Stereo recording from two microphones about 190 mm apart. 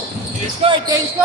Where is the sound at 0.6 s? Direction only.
25° right (ahead or behind).